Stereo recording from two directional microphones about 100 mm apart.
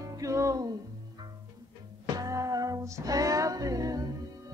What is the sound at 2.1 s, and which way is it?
Music, 35° right (ahead or behind).